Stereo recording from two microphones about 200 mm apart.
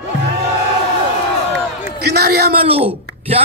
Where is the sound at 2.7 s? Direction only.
30° right (ahead or behind).